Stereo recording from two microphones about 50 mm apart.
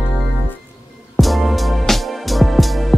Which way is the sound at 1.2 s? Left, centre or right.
Centre.